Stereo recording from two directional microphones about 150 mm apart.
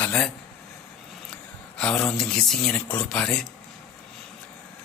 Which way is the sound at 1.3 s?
5° left (ahead or behind).